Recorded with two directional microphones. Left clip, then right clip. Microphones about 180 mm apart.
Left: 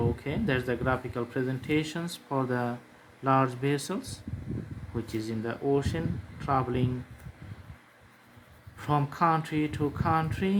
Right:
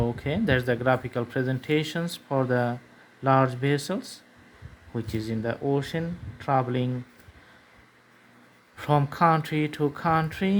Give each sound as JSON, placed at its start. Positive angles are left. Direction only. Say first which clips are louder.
{"t": 0.2, "sound": "speech", "louder": "right 5 dB", "side_deg": -40}
{"t": 8.8, "sound": "speech", "louder": "right 4 dB", "side_deg": -40}